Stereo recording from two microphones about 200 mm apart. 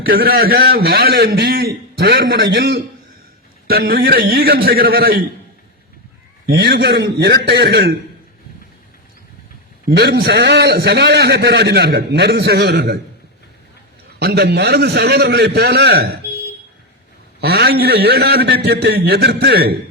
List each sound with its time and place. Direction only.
0.0 s a man's voice: 50° right (ahead or behind)
6.5 s a man's voice: 50° right (ahead or behind)
9.9 s a man's voice: 55° right (ahead or behind)
14.2 s a man's voice: 55° right (ahead or behind)
17.4 s a man's voice: 50° right (ahead or behind)